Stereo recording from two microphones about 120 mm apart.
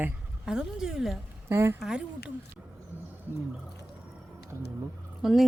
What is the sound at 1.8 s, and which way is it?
Speech, 5° right (ahead or behind).